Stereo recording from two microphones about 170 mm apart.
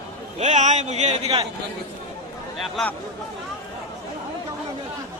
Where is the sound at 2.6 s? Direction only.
5° left (ahead or behind).